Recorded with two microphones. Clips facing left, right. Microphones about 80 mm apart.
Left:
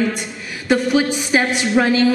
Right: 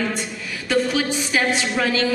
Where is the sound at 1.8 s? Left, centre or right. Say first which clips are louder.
Left 8 dB; left.